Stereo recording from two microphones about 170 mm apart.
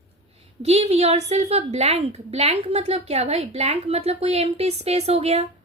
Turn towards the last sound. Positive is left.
turn(degrees=-40)  # may be behind; listen again after turning